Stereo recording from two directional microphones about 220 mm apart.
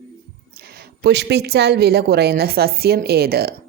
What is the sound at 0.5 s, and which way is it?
A woman's voice, 45° right (ahead or behind).